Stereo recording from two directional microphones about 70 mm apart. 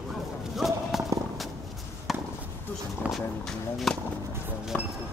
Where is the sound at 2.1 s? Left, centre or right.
Centre.